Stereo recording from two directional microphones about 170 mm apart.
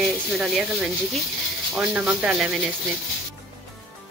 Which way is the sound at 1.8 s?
5° right (ahead or behind).